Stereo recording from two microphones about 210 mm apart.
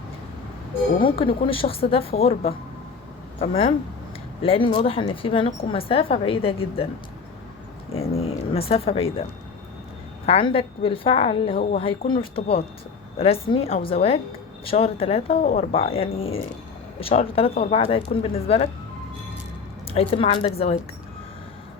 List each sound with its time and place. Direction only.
1.0 s a woman's voice: 25° left (ahead or behind)
7.9 s a woman's voice: 30° left (ahead or behind)
10.2 s a woman's voice: 25° left (ahead or behind)
19.9 s a woman's voice: 25° left (ahead or behind)